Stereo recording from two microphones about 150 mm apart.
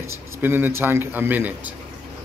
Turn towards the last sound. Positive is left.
turn(degrees=-10)  # may be behind; listen again after turning